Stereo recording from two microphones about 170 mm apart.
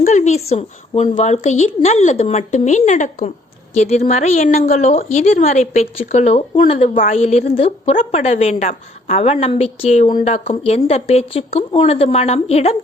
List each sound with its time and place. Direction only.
0.0 s a woman's voice: 45° left (ahead or behind)
6.9 s a woman's voice: 45° left (ahead or behind)